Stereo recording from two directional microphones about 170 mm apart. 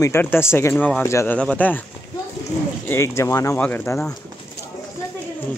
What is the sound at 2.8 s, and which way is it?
Speech, 15° left (ahead or behind).